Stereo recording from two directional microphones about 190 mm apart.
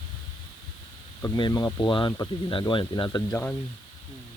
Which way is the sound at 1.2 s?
20° left (ahead or behind).